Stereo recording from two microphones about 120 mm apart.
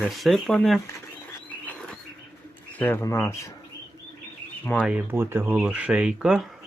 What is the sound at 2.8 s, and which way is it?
Speech, 15° left (ahead or behind).